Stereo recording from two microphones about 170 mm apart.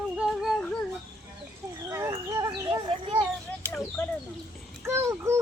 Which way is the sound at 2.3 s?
20° right (ahead or behind).